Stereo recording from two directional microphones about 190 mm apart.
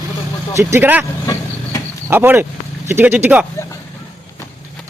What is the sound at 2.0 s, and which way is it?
Speech, 10° right (ahead or behind).